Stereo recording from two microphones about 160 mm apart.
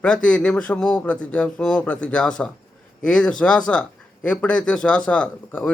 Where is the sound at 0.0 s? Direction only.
5° left (ahead or behind).